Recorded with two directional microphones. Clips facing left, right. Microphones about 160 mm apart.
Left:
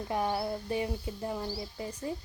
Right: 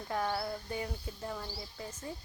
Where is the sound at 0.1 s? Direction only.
20° left (ahead or behind).